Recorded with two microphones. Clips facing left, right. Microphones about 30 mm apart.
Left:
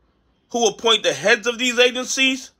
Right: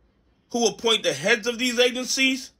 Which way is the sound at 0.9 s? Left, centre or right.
Left.